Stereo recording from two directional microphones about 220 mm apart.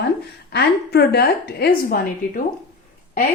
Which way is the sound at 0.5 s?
45° left (ahead or behind).